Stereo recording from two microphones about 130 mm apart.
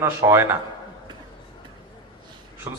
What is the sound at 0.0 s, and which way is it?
Speech, 20° right (ahead or behind).